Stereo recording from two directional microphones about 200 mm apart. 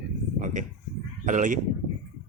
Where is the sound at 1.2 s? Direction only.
40° right (ahead or behind).